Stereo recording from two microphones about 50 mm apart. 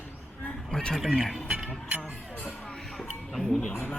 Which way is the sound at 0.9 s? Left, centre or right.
Centre.